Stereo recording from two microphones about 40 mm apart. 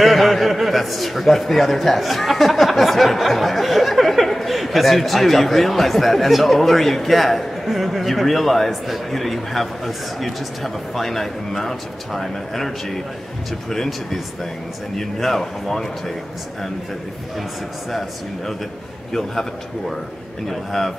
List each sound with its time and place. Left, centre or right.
0.0 s a man's voice: centre
20.4 s speech: centre